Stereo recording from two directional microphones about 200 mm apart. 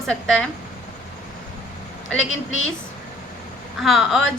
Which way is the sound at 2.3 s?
70° left (ahead or behind).